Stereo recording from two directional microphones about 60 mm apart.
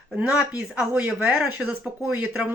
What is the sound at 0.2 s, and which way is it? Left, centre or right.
Speech, centre.